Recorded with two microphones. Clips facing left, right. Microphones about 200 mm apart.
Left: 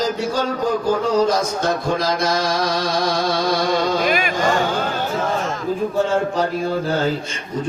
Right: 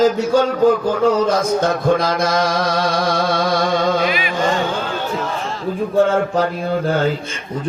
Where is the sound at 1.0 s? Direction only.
55° right (ahead or behind).